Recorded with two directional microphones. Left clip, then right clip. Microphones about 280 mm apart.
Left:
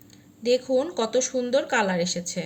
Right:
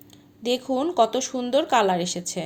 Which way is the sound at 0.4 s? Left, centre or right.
Right.